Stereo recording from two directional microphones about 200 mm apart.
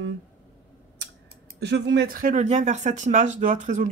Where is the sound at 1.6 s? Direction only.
60° right (ahead or behind).